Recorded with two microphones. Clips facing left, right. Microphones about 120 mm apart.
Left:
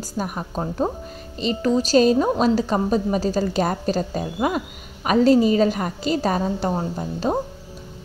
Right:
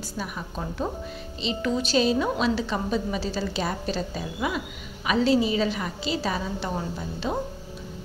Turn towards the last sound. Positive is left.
turn(degrees=40)  # may be behind; listen again after turning